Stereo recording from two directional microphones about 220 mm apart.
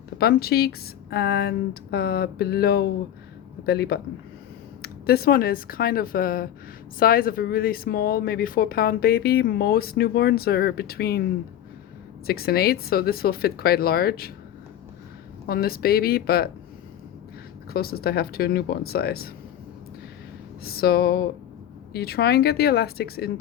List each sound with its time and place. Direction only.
0.2 s speech: 45° left (ahead or behind)
15.4 s speech: 45° left (ahead or behind)
17.7 s speech: 45° left (ahead or behind)
20.7 s speech: 45° left (ahead or behind)